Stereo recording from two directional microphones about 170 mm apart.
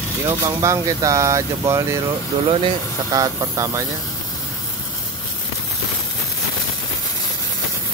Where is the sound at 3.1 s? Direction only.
20° right (ahead or behind).